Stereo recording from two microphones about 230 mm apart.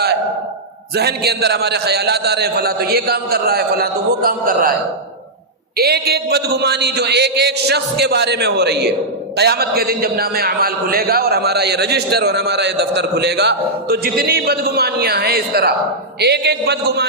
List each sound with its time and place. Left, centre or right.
0.9 s a man's voice: right
5.7 s a man's voice: right